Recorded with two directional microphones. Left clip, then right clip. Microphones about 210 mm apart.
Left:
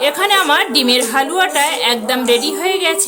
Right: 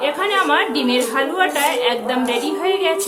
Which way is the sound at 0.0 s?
55° left (ahead or behind).